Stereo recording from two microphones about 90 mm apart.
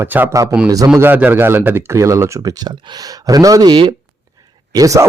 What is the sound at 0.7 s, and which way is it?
Speech, 40° right (ahead or behind).